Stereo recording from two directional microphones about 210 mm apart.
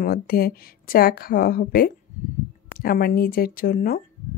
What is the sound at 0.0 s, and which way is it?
Speech, 45° left (ahead or behind).